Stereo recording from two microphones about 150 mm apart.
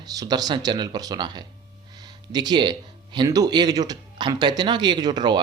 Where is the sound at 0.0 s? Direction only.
25° right (ahead or behind).